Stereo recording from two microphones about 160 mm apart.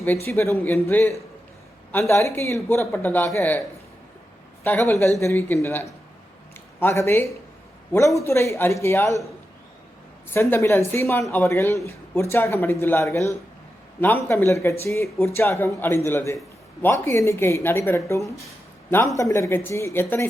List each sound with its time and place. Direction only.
0.3 s speech: 15° left (ahead or behind)
4.6 s speech: 15° left (ahead or behind)
10.3 s speech: 15° left (ahead or behind)